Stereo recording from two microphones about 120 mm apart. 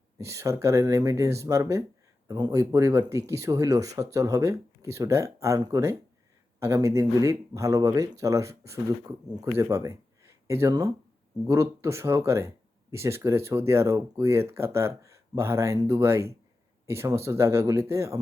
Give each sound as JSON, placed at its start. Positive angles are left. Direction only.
{"t": 0.2, "sound": "speech", "side_deg": -25}